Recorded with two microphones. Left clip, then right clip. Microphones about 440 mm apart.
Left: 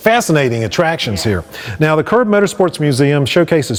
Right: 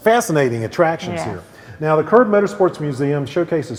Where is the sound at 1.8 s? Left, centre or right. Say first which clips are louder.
Left 1 dB; left.